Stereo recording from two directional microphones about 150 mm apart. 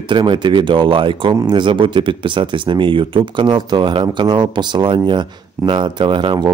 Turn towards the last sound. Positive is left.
turn(degrees=-30)  # may be behind; listen again after turning